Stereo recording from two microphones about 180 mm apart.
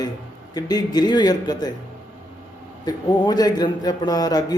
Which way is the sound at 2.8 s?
20° left (ahead or behind).